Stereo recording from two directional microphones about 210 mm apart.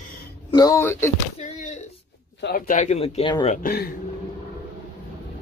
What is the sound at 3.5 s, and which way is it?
Speech, 45° left (ahead or behind).